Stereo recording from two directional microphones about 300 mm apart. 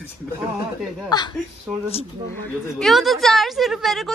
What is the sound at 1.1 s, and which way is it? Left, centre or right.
Speech, centre.